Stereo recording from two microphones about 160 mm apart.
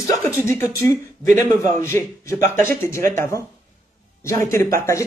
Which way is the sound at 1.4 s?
20° left (ahead or behind).